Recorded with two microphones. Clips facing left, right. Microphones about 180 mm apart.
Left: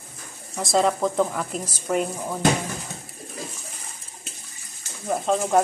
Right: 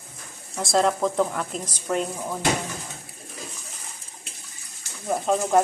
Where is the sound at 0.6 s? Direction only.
Centre (ahead or behind).